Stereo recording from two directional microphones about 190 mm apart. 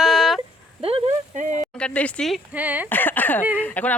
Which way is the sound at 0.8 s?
35° right (ahead or behind).